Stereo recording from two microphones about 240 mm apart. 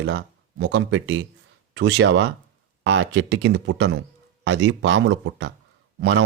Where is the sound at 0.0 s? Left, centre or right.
Right.